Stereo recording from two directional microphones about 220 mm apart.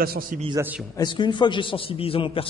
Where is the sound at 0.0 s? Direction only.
40° right (ahead or behind).